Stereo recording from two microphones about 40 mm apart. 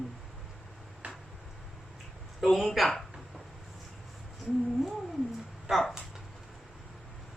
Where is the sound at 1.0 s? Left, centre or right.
Right.